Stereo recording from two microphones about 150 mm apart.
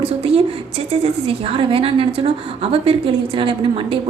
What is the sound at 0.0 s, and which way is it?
A woman's voice, 40° right (ahead or behind).